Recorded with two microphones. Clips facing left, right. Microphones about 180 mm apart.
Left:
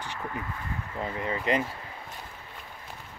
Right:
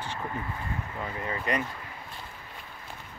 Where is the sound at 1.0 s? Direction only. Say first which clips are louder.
Left 4 dB; 25° left (ahead or behind).